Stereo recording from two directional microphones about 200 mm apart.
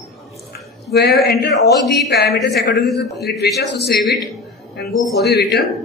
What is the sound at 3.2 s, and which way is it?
A man's voice, 55° left (ahead or behind).